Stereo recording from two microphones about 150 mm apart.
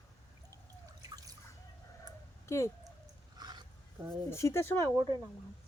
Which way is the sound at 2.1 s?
25° right (ahead or behind).